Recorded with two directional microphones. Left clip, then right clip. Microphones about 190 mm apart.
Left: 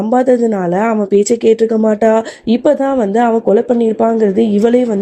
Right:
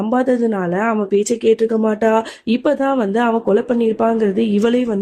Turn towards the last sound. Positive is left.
turn(degrees=10)  # may be behind; listen again after turning